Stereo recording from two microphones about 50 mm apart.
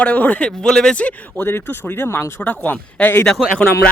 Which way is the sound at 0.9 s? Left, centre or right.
Left.